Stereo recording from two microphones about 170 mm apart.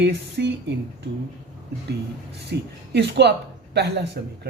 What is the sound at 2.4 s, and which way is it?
A man's voice, 75° right (ahead or behind).